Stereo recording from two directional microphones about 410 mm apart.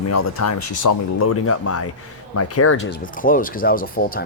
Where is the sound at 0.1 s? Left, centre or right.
Left.